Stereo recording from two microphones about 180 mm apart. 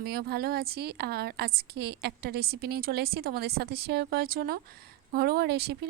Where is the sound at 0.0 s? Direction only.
60° right (ahead or behind).